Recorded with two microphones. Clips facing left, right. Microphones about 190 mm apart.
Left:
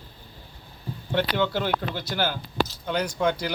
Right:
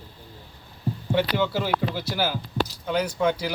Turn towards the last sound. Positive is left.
turn(degrees=-5)  # may be behind; listen again after turning